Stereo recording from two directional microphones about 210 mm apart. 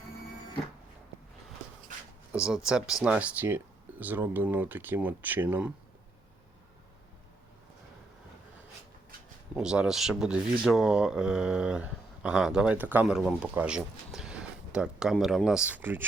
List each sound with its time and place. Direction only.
2.3 s speech: 5° right (ahead or behind)
9.6 s speech: 5° right (ahead or behind)